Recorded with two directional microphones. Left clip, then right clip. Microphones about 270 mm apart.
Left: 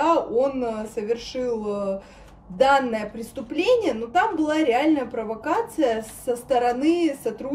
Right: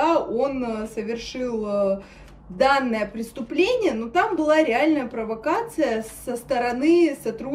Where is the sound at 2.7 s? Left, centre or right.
Left.